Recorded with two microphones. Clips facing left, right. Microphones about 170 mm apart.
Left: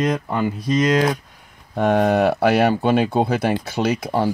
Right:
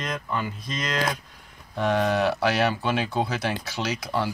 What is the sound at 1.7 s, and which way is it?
Speech, 55° left (ahead or behind).